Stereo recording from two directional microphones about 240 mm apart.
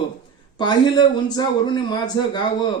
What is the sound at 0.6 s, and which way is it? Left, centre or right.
A man's voice, centre.